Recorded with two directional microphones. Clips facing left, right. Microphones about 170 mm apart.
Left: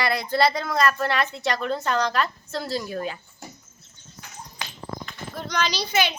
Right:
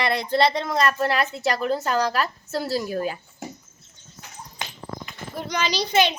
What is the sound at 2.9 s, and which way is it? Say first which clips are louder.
Speech: right 3 dB; 40° right (ahead or behind).